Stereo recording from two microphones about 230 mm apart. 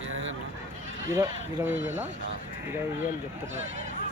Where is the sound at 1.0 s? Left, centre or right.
Centre.